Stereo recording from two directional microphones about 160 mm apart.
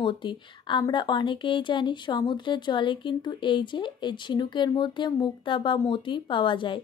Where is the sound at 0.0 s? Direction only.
30° left (ahead or behind).